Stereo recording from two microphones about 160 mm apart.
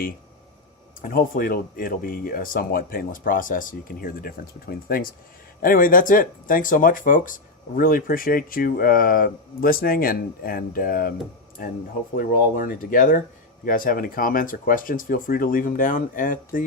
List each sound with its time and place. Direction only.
1.0 s speech: 60° left (ahead or behind)
12.1 s speech: 60° left (ahead or behind)